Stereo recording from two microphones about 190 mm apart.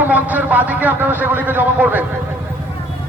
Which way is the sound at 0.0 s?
10° right (ahead or behind).